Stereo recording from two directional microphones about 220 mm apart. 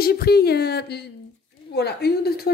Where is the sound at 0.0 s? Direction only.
45° left (ahead or behind).